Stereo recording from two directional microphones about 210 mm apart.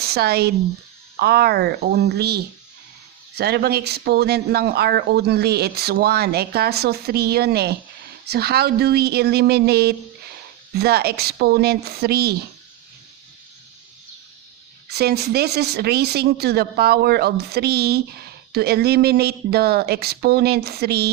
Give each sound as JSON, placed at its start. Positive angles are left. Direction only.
{"t": 0.0, "sound": "speech", "side_deg": -50}
{"t": 14.8, "sound": "speech", "side_deg": -50}